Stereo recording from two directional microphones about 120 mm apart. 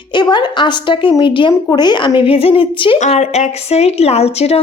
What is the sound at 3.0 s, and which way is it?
Speech, 70° left (ahead or behind).